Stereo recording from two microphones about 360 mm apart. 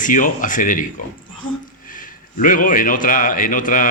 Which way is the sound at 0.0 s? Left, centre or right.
Left.